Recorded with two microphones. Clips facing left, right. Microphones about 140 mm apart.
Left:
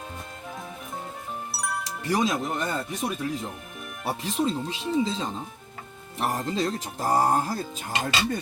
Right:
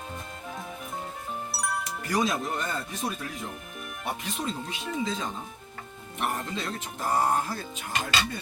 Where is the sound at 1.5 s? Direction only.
Centre (ahead or behind).